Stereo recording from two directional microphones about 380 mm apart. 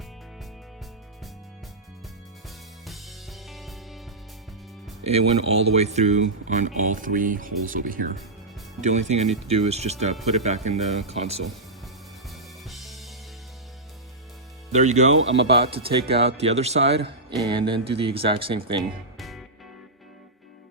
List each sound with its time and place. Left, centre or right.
3.5 s music: centre
5.0 s a man's voice: centre
12.3 s music: centre
14.7 s a man's voice: centre
15.1 s speech: right
15.5 s a man's voice: centre
18.8 s music: centre